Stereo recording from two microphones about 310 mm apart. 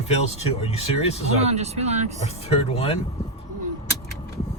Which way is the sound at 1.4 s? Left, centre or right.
Right.